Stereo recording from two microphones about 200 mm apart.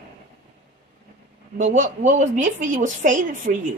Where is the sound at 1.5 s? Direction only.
40° right (ahead or behind).